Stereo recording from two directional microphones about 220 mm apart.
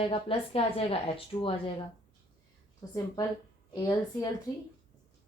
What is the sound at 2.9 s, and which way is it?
A woman's voice, 20° left (ahead or behind).